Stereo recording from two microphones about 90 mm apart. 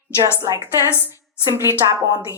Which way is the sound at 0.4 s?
35° right (ahead or behind).